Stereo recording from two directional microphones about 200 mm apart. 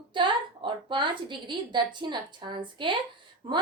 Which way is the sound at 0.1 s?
25° right (ahead or behind).